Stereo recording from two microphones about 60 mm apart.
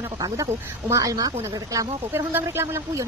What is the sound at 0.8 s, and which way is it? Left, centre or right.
Speech, right.